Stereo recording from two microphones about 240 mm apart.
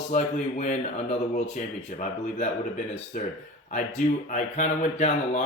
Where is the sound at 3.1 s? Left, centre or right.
Left.